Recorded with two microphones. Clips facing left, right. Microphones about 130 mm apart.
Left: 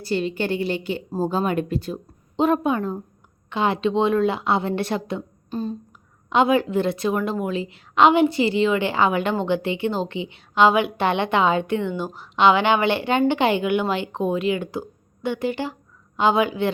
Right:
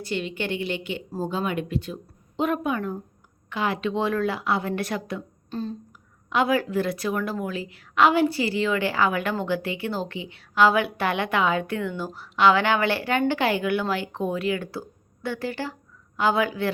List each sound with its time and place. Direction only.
0.0 s a woman's voice: 35° left (ahead or behind)
2.3 s a woman's voice: 30° left (ahead or behind)
5.5 s a sound: 15° left (ahead or behind)
6.3 s a woman's voice: 20° left (ahead or behind)